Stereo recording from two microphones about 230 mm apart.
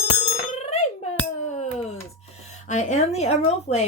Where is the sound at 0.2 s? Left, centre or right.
Left.